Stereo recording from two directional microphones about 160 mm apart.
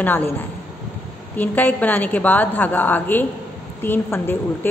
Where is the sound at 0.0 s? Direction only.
15° left (ahead or behind).